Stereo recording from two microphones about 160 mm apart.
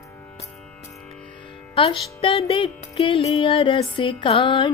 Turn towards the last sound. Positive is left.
turn(degrees=30)  # may be behind; listen again after turning